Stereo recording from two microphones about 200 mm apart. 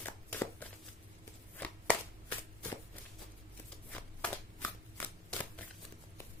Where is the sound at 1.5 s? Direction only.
5° left (ahead or behind).